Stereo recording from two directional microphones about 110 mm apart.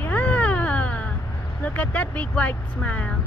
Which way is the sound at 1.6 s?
15° left (ahead or behind).